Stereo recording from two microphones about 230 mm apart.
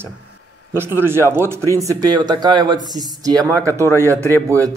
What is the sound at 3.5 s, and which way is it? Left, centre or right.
Speech, centre.